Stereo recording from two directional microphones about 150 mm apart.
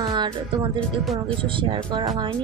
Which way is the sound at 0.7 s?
Centre (ahead or behind).